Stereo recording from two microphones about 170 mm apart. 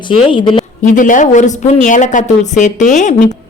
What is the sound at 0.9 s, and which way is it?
Speech, 50° left (ahead or behind).